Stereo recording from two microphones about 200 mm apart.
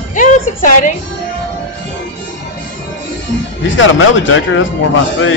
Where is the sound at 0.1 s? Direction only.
40° left (ahead or behind).